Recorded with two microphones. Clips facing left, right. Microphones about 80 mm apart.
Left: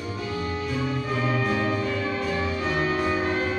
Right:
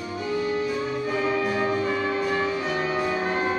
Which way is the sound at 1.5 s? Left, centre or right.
Right.